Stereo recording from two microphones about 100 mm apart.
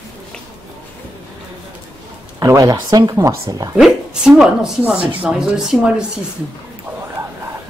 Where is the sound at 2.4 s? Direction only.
35° right (ahead or behind).